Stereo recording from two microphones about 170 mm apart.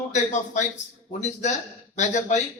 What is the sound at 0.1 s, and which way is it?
Speech, 45° left (ahead or behind).